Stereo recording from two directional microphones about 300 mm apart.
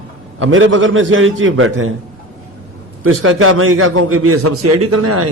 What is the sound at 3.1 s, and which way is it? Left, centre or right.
A man's voice, right.